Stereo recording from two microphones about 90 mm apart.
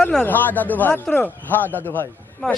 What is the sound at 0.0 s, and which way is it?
Speech, 10° left (ahead or behind).